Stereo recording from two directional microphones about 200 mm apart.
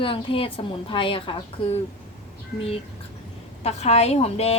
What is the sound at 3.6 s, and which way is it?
Speech, 30° left (ahead or behind).